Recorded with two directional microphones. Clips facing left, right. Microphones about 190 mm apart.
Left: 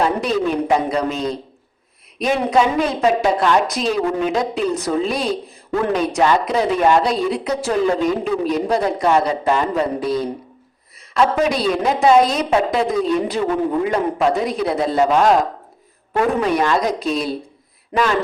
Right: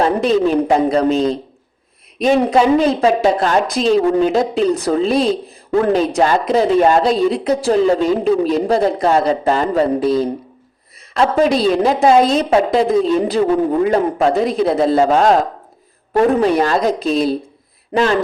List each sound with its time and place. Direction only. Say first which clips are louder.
0.0 s speech: right 4 dB; 30° right (ahead or behind)
3.3 s speech: right 1 dB; 40° right (ahead or behind)
3.8 s speech: right 6 dB; 30° right (ahead or behind)
6.2 s speech: even; 45° right (ahead or behind)
11.2 s speech: right 3 dB; 35° right (ahead or behind)